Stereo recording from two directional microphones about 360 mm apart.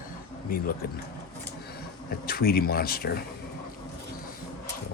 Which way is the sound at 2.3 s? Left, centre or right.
Left.